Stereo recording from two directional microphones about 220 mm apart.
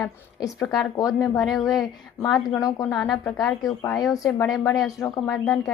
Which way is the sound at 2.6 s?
15° left (ahead or behind).